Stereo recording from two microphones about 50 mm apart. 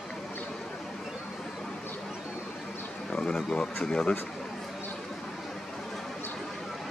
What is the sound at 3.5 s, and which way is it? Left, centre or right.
Speech, centre.